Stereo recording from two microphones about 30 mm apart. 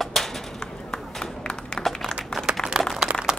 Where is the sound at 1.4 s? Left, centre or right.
Left.